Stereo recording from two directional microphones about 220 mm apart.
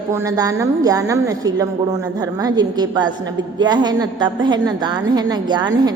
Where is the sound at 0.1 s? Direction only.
15° right (ahead or behind).